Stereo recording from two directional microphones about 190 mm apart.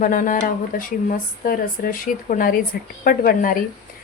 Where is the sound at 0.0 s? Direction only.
45° left (ahead or behind).